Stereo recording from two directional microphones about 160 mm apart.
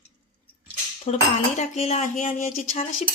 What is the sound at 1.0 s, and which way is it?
Cutlery, 45° left (ahead or behind).